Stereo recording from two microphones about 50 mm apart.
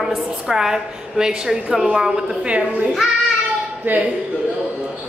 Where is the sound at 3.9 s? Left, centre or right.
Right.